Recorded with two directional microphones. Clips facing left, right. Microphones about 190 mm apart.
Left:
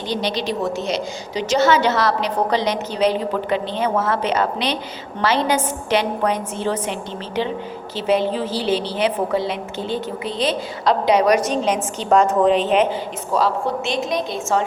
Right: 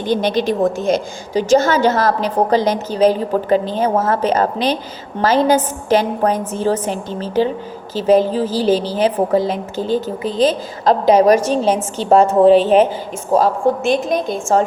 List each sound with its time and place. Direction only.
0.1 s a woman's voice: 50° right (ahead or behind)
11.6 s a woman's voice: 30° right (ahead or behind)
13.3 s a woman's voice: 45° right (ahead or behind)